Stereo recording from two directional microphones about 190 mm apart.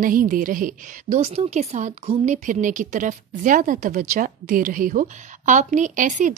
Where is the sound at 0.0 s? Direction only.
45° right (ahead or behind).